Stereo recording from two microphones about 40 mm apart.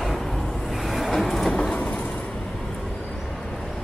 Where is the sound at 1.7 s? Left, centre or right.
Left.